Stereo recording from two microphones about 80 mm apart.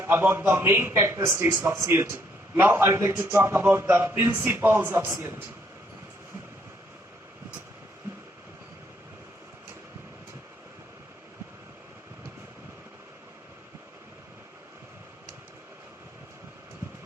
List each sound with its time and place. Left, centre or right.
0.0 s a man's voice: right
1.9 s a man's voice: right